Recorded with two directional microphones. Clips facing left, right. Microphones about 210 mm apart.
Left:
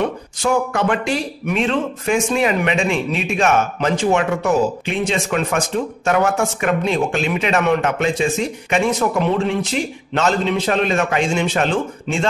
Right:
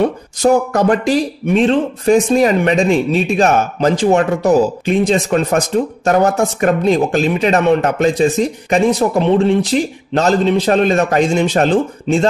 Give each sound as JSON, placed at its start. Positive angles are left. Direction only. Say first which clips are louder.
{"t": 0.0, "sound": "speech", "louder": "right 7 dB", "side_deg": -40}